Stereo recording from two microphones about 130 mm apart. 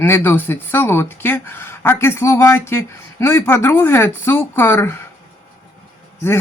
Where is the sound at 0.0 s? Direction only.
15° left (ahead or behind).